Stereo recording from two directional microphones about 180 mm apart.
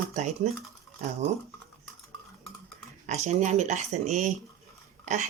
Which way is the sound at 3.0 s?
40° right (ahead or behind).